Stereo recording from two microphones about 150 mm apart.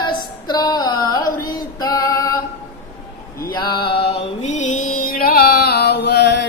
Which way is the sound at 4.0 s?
45° left (ahead or behind).